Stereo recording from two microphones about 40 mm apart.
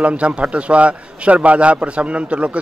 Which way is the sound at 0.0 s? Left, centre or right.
Right.